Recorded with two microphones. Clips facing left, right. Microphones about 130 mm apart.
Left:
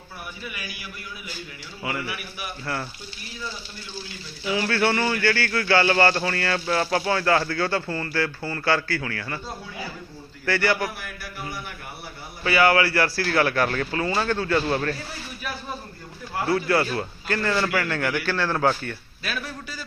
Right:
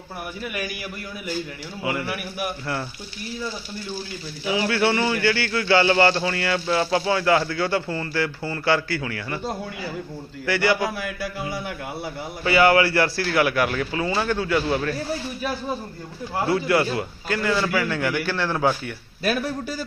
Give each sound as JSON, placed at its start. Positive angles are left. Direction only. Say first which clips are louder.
{"t": 0.4, "sound": "a man's voice", "louder": "right 9 dB", "side_deg": -50}
{"t": 2.0, "sound": "a man's voice", "louder": "right 6 dB", "side_deg": -50}
{"t": 4.4, "sound": "speech", "louder": "right 1 dB", "side_deg": -20}
{"t": 10.4, "sound": "a man's voice", "louder": "right 2 dB", "side_deg": -15}
{"t": 10.9, "sound": "a sound", "louder": "right 8 dB", "side_deg": -90}
{"t": 12.5, "sound": "a man's voice", "louder": "right 2 dB", "side_deg": -25}
{"t": 16.3, "sound": "a man's voice", "louder": "right 1 dB", "side_deg": -25}
{"t": 19.2, "sound": "a man's voice", "louder": "right 9 dB", "side_deg": -40}